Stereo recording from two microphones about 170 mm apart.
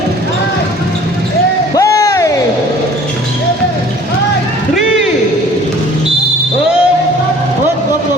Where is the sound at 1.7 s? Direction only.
20° left (ahead or behind).